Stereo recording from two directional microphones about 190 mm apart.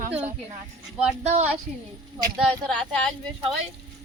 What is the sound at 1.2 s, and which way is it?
Speech, 35° right (ahead or behind).